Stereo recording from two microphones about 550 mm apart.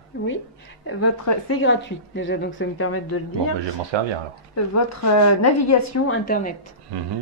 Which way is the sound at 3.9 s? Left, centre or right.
Right.